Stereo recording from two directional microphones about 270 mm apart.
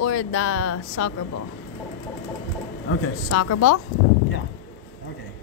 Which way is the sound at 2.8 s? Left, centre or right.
Left.